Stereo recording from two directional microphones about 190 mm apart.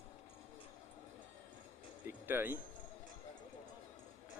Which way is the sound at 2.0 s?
10° right (ahead or behind).